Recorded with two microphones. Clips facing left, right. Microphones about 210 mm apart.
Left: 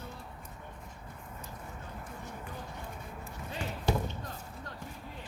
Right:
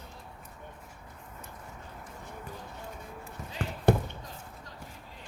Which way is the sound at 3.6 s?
55° right (ahead or behind).